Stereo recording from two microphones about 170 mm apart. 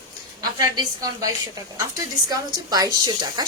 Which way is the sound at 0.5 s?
20° right (ahead or behind).